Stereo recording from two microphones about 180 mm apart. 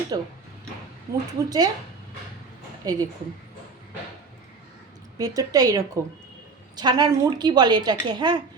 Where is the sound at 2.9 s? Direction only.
20° right (ahead or behind).